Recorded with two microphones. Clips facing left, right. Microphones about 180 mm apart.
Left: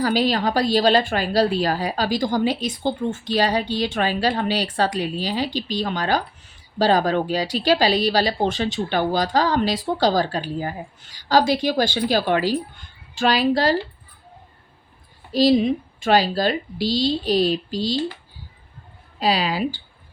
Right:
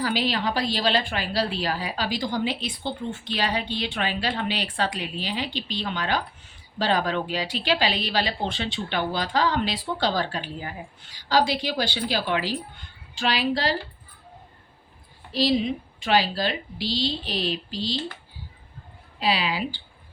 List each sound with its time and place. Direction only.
0.0 s a woman's voice: 45° left (ahead or behind)
15.3 s a woman's voice: 45° left (ahead or behind)
19.2 s speech: 40° left (ahead or behind)